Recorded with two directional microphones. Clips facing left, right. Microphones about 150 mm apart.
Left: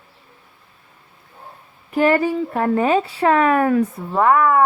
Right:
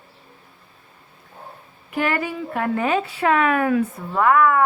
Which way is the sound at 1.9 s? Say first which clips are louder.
Left 7 dB; 35° left (ahead or behind).